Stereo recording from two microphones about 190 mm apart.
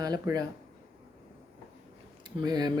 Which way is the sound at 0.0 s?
20° right (ahead or behind).